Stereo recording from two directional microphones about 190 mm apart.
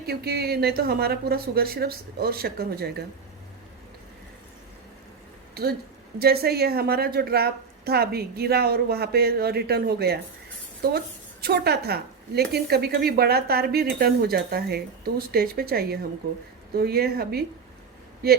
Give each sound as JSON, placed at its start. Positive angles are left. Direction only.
{"t": 0.0, "sound": "a woman's voice", "side_deg": -55}
{"t": 6.1, "sound": "a woman's voice", "side_deg": -55}